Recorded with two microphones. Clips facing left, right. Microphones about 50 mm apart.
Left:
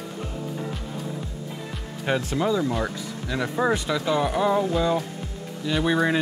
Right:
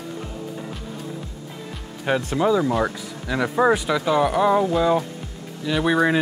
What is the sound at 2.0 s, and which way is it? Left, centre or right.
Speech, centre.